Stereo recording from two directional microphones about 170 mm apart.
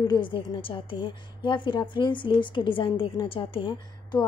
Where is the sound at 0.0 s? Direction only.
25° left (ahead or behind).